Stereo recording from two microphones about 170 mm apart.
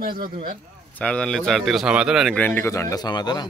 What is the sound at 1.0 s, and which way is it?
Speech, 5° left (ahead or behind).